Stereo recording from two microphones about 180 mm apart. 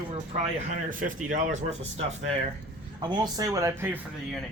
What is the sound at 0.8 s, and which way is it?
Speech, 45° right (ahead or behind).